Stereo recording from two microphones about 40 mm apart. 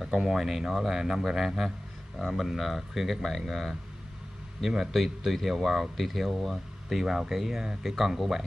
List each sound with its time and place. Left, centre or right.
0.3 s speech: centre